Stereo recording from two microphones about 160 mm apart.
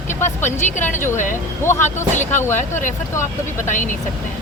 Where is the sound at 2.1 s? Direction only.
50° left (ahead or behind).